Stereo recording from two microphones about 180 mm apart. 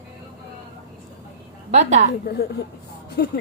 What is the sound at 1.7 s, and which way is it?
Speech, 40° right (ahead or behind).